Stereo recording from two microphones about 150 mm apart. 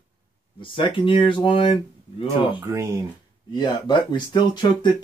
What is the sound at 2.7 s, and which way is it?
Speech, 20° right (ahead or behind).